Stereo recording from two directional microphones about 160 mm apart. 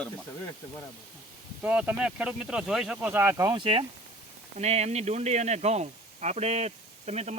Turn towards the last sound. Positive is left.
turn(degrees=-40)  # may be behind; listen again after turning